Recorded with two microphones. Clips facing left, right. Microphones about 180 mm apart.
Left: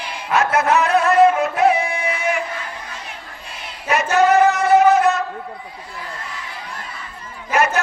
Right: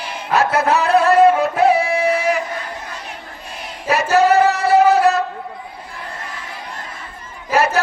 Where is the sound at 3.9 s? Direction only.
35° right (ahead or behind).